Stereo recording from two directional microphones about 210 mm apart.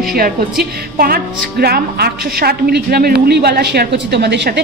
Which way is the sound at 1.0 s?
45° right (ahead or behind).